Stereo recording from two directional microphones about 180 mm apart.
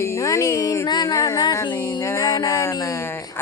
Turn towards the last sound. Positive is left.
turn(degrees=15)  # may be behind; listen again after turning